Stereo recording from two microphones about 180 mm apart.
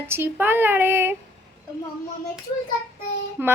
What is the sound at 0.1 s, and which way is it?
A woman's voice, 10° right (ahead or behind).